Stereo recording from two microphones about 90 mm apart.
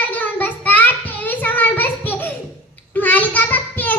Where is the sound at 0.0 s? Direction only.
20° left (ahead or behind).